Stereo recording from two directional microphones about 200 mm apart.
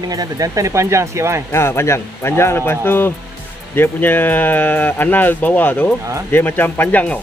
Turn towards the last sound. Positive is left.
turn(degrees=5)  # may be behind; listen again after turning